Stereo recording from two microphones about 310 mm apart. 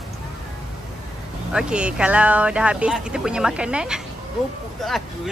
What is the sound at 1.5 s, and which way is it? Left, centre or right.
Speech, centre.